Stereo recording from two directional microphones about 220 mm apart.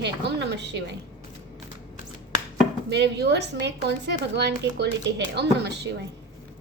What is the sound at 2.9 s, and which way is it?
A woman's voice, 50° right (ahead or behind).